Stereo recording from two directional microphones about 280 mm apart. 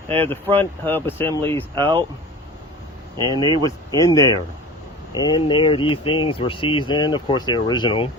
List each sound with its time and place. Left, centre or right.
0.5 s speech: centre
1.7 s speech: centre
3.2 s speech: centre
3.9 s speech: centre